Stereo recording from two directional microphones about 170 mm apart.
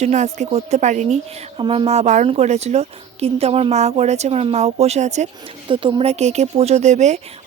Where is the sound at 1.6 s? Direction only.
25° right (ahead or behind).